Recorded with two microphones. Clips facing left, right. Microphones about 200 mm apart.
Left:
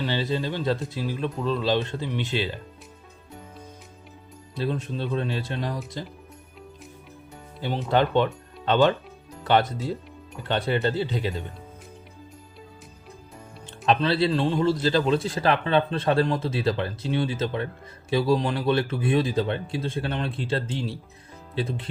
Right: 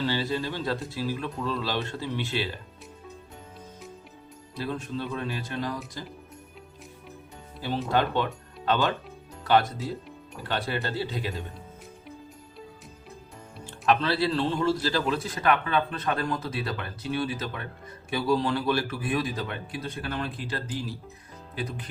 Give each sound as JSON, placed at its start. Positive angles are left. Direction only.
{"t": 0.0, "sound": "a man's voice", "side_deg": 20}
{"t": 4.5, "sound": "a man's voice", "side_deg": 20}
{"t": 7.9, "sound": "a man's voice", "side_deg": 20}
{"t": 13.7, "sound": "a man's voice", "side_deg": 20}